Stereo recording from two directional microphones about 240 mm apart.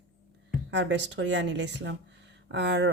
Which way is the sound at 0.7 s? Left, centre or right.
Right.